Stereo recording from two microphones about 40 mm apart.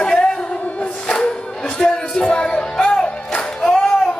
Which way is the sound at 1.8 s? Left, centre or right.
Left.